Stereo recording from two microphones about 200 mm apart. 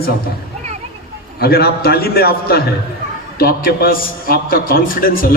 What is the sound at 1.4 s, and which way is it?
A man's voice, 50° left (ahead or behind).